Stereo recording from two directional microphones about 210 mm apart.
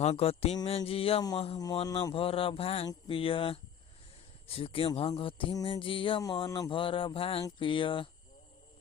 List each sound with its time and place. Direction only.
0.0 s speech: 30° left (ahead or behind)